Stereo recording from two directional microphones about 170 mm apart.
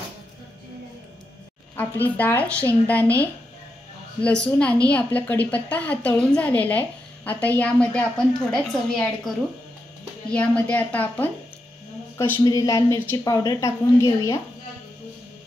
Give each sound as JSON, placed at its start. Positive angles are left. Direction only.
{"t": 1.8, "sound": "a woman's voice", "side_deg": 10}